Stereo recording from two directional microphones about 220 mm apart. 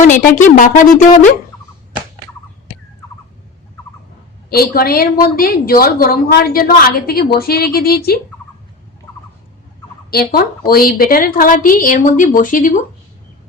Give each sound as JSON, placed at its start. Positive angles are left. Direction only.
{"t": 0.4, "sound": "a woman's voice", "side_deg": 35}
{"t": 4.4, "sound": "a woman's voice", "side_deg": 45}
{"t": 10.1, "sound": "a woman's voice", "side_deg": 45}